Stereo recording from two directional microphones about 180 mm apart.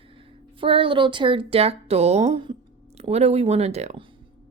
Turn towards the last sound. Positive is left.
turn(degrees=-35)  # may be behind; listen again after turning